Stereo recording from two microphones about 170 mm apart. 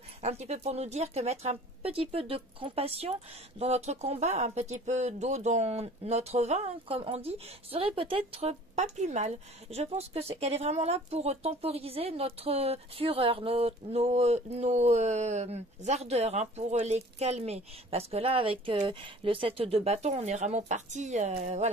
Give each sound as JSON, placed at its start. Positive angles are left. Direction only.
{"t": 0.2, "sound": "speech", "side_deg": -40}